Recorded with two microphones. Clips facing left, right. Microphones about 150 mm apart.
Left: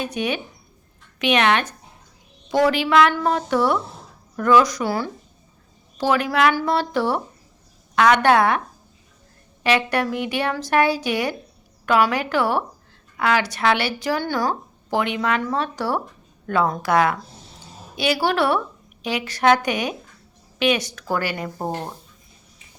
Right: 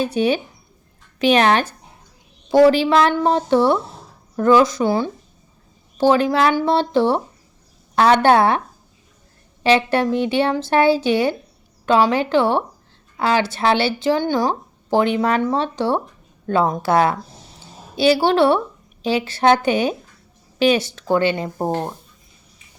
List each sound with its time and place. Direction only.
0.0 s speech: 30° right (ahead or behind)
9.6 s speech: 30° right (ahead or behind)